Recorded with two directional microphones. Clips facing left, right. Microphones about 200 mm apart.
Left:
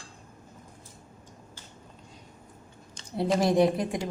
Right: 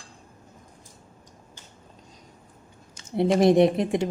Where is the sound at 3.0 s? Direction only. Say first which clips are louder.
Right 6 dB; 25° right (ahead or behind).